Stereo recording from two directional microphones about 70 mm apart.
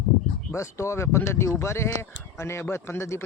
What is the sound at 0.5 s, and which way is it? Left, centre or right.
Speech, left.